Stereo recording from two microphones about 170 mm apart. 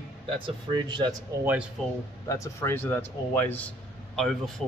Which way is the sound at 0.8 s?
25° right (ahead or behind).